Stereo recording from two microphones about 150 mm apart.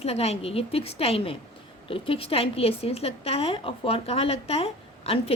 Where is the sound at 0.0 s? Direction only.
45° left (ahead or behind).